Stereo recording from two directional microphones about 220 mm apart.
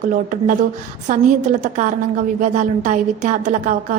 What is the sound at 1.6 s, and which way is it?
A woman's voice, 35° right (ahead or behind).